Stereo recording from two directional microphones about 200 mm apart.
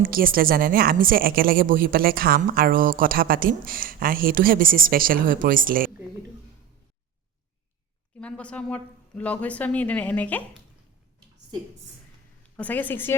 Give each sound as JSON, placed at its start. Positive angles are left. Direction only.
{"t": 0.0, "sound": "a woman's voice", "side_deg": -45}
{"t": 8.2, "sound": "speech", "side_deg": 5}
{"t": 12.5, "sound": "speech", "side_deg": 10}